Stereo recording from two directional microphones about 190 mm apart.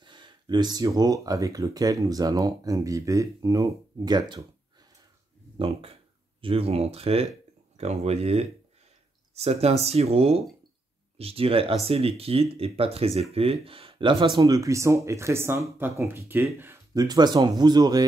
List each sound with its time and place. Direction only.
0.0 s speech: 25° right (ahead or behind)
5.6 s speech: 30° right (ahead or behind)